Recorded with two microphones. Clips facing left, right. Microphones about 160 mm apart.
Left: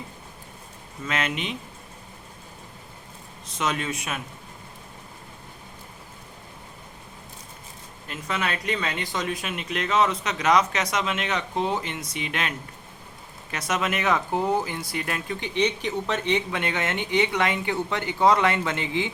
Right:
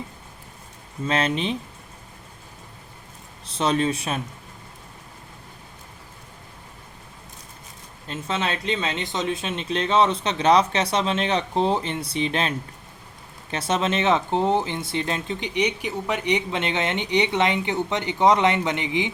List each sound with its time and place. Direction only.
1.0 s speech: 30° right (ahead or behind)
3.4 s speech: 30° right (ahead or behind)
8.0 s speech: 25° right (ahead or behind)